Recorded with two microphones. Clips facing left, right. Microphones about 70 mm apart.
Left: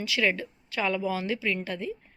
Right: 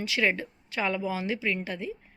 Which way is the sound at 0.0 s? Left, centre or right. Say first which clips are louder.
Even; right.